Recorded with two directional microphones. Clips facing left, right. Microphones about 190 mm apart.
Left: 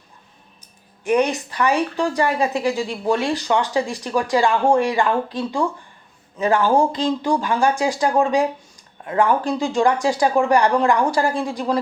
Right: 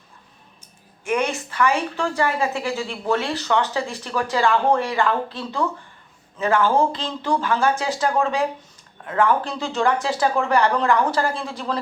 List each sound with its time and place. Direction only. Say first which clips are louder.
1.0 s speech: left 5 dB; 15° left (ahead or behind)